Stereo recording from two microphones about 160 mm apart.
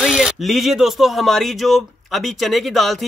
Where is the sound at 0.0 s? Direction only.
Centre (ahead or behind).